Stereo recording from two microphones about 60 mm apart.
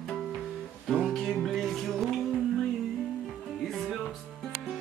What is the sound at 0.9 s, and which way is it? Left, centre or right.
Music, centre.